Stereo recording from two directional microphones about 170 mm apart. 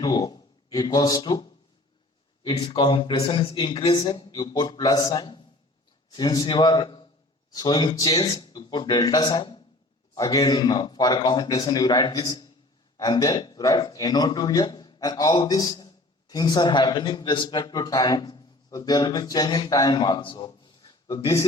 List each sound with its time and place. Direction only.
0.0 s a man's voice: 25° left (ahead or behind)